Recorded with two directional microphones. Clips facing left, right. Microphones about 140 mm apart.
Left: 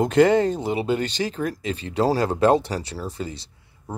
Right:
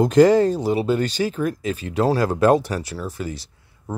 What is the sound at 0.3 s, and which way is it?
Speech, 20° left (ahead or behind).